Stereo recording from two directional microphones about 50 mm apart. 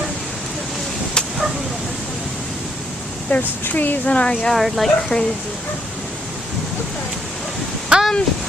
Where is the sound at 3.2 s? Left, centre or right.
Left.